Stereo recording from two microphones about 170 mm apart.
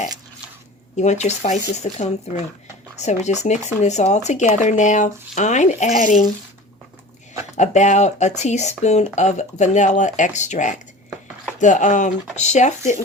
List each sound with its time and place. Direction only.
0.9 s speech: 40° left (ahead or behind)
7.5 s speech: 45° left (ahead or behind)